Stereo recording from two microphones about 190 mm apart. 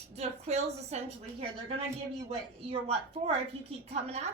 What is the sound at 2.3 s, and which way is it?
A woman's voice, 30° right (ahead or behind).